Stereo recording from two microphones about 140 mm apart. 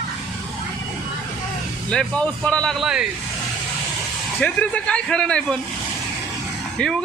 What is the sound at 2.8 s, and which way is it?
Speech, 5° right (ahead or behind).